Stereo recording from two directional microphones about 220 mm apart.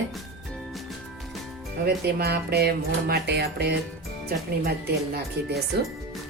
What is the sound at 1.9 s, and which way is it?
Speech, 45° right (ahead or behind).